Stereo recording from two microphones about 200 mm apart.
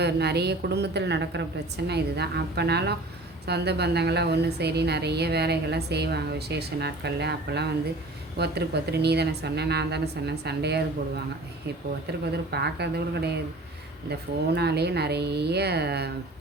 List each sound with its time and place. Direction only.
0.0 s a woman's voice: 55° right (ahead or behind)
12.5 s a woman's voice: 55° right (ahead or behind)